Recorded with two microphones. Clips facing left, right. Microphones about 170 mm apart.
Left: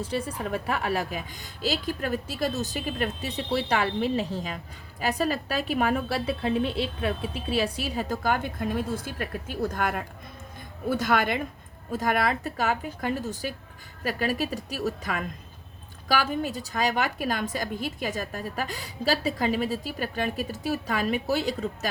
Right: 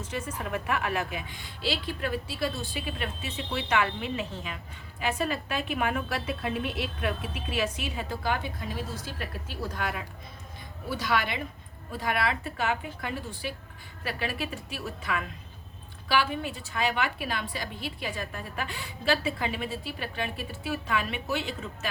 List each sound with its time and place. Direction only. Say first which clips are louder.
0.0 s a woman's voice: left 5 dB; 35° left (ahead or behind)